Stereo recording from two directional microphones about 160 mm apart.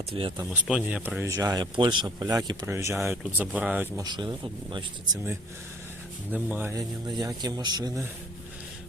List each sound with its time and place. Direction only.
0.1 s speech: 35° right (ahead or behind)
0.5 s speech: 10° right (ahead or behind)
3.9 s speech: 25° right (ahead or behind)
6.3 s speech: 10° right (ahead or behind)
7.2 s speech: 25° right (ahead or behind)